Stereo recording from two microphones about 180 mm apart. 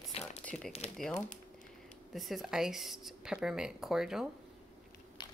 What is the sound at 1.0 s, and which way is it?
Speech, centre (ahead or behind).